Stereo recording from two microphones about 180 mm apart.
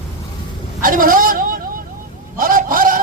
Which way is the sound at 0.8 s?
50° right (ahead or behind).